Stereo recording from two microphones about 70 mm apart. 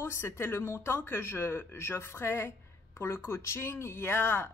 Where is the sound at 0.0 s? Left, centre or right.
Left.